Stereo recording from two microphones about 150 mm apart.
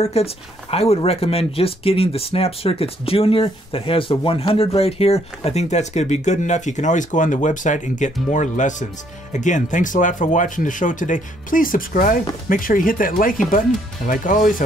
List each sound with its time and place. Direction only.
0.0 s speech: 45° left (ahead or behind); by 14.4 s 65° left (ahead or behind)